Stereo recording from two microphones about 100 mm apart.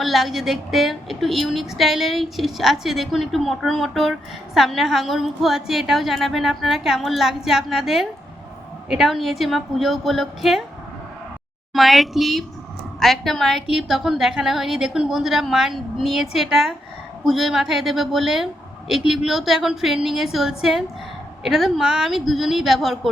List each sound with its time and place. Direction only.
0.0 s a woman's voice: centre (ahead or behind)
11.7 s a woman's voice: centre (ahead or behind)